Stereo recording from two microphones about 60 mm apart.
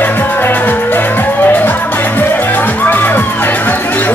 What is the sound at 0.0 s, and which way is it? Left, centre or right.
Music, left.